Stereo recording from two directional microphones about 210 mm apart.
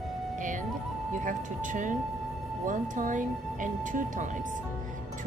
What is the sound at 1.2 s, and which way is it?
Speech, 40° right (ahead or behind).